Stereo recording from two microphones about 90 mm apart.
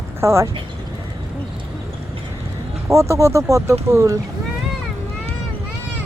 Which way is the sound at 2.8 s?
30° right (ahead or behind).